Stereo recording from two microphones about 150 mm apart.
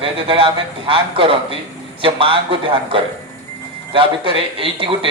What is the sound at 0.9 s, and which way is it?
Speech, 35° right (ahead or behind).